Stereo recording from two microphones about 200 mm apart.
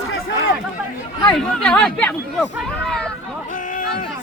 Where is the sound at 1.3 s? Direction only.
5° left (ahead or behind).